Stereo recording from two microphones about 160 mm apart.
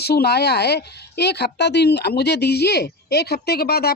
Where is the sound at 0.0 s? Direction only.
85° left.